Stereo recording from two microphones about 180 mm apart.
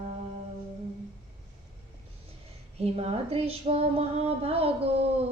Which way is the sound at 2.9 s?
35° right (ahead or behind).